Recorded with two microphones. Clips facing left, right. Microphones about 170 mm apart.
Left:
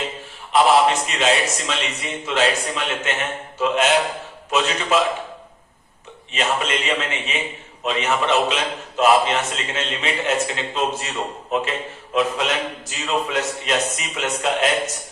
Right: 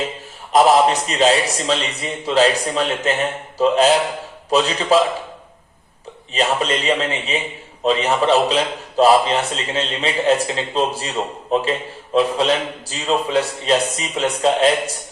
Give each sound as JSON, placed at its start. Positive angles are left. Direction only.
{"t": 0.5, "sound": "a man's voice", "side_deg": -40}
{"t": 6.3, "sound": "a man's voice", "side_deg": -35}